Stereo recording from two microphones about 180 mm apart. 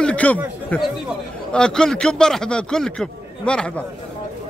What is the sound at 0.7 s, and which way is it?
A man's voice, 10° left (ahead or behind).